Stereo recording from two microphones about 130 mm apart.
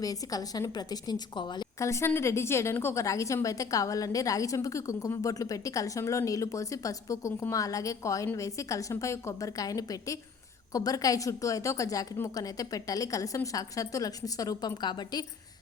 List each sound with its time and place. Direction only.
0.0 s a woman's voice: 30° left (ahead or behind)
1.8 s a woman's voice: 20° left (ahead or behind)